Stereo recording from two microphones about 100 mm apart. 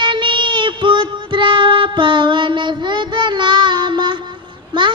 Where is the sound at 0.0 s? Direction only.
50° right (ahead or behind).